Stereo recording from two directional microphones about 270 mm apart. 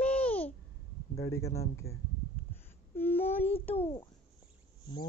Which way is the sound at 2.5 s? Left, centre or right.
Centre.